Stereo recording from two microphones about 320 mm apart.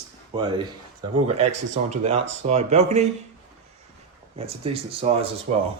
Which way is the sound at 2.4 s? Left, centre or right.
Right.